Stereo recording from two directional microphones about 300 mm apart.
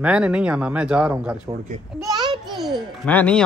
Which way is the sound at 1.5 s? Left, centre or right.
Right.